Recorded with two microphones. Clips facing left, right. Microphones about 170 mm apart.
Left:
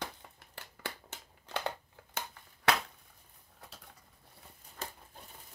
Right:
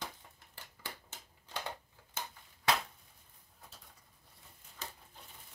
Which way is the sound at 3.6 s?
75° left (ahead or behind).